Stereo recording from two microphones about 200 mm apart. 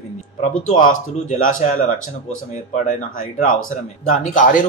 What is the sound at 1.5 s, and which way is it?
Speech, 40° left (ahead or behind).